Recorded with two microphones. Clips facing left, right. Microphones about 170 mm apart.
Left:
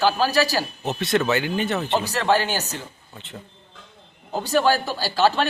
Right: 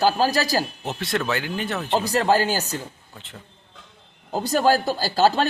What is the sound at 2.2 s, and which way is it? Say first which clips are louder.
Speech: right 1 dB; 40° right (ahead or behind).